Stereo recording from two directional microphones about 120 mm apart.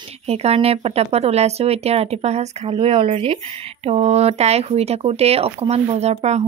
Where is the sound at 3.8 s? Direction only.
60° right (ahead or behind).